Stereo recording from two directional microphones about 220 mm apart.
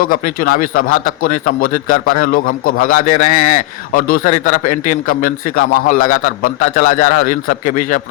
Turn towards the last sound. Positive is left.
turn(degrees=35)  # may be behind; listen again after turning